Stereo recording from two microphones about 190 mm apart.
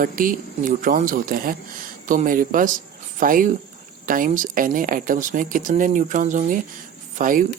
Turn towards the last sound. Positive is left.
turn(degrees=-45)  # may be behind; listen again after turning